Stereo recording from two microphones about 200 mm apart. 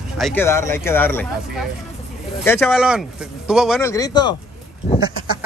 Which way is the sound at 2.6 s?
5° right (ahead or behind).